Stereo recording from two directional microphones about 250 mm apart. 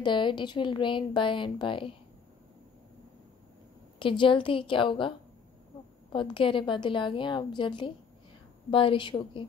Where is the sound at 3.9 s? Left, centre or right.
Centre.